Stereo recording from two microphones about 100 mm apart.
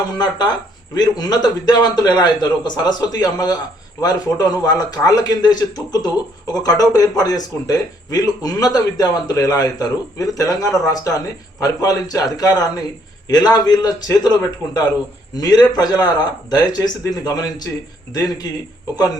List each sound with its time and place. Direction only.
0.2 s a man's voice: 45° left (ahead or behind)